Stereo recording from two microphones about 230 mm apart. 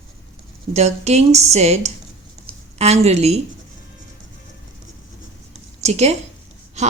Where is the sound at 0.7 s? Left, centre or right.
Right.